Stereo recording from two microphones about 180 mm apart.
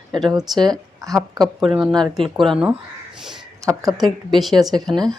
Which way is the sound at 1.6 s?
Centre (ahead or behind).